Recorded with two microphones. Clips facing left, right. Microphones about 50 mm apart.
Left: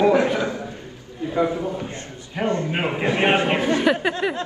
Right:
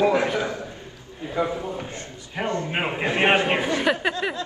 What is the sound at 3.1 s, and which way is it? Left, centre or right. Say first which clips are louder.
Speech: left 1 dB; right.